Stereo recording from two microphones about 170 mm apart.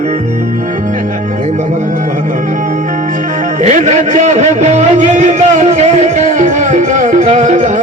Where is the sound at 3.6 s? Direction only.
45° right (ahead or behind).